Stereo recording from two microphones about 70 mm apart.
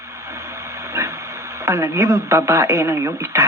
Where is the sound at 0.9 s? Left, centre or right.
Right.